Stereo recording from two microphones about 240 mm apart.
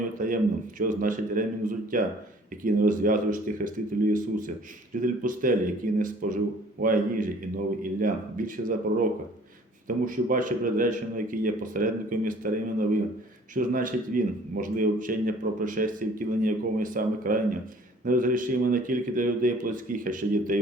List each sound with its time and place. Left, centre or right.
0.2 s a man's voice: right